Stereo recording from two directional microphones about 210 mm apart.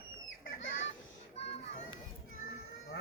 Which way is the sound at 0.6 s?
65° left (ahead or behind).